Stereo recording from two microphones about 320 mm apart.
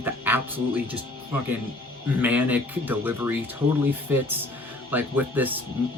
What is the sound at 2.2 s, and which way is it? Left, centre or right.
Speech, centre.